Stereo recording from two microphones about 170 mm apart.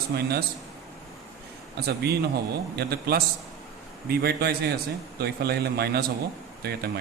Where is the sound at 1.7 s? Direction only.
70° right (ahead or behind).